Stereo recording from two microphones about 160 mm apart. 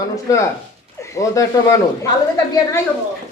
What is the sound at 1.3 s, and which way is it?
Speech, 20° left (ahead or behind).